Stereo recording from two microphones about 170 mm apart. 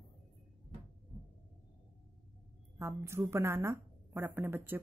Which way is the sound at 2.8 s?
15° right (ahead or behind).